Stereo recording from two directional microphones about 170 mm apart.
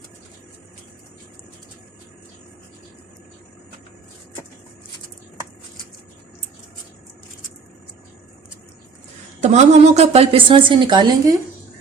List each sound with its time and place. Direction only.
9.4 s a woman's voice: 40° right (ahead or behind)